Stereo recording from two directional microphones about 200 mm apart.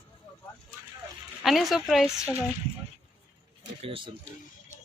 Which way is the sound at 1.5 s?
Centre (ahead or behind).